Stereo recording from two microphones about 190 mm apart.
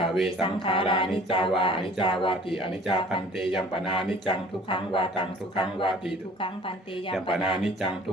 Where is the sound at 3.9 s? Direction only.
25° left (ahead or behind).